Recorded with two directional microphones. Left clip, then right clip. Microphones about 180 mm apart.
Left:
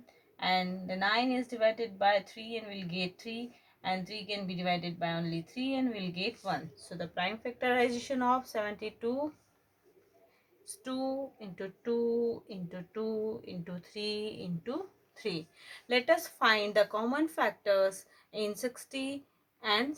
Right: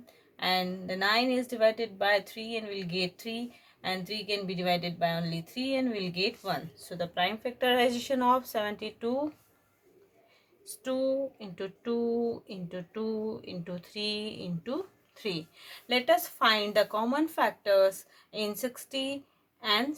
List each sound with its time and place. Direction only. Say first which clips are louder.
0.0 s a woman's voice: right 2 dB; 40° right (ahead or behind)
10.8 s speech: right 6 dB; 25° right (ahead or behind)